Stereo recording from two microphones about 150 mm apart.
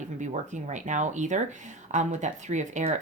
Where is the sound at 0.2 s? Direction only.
55° right (ahead or behind).